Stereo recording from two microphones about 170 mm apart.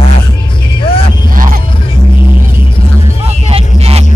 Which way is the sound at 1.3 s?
55° right (ahead or behind).